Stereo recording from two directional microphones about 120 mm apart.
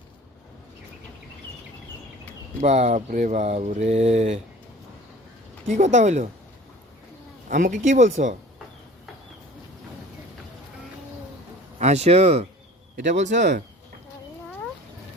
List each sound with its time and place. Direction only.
2.6 s a sound: 70° right (ahead or behind)
5.6 s speech: 85° right
7.5 s speech: 90° right
11.8 s speech: 65° right (ahead or behind)
13.1 s speech: 90° right